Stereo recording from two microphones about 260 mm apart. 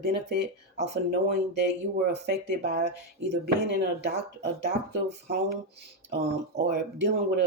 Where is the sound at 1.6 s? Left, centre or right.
Right.